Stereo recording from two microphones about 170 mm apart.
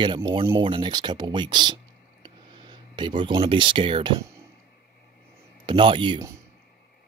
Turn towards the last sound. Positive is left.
turn(degrees=-30)  # may be behind; listen again after turning